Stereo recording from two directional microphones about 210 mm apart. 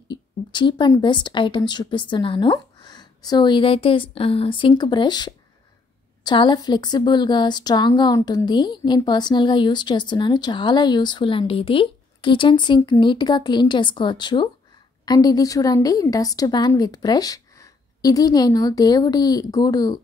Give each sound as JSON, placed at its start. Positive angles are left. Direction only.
{"t": 0.1, "sound": "a woman's voice", "side_deg": 20}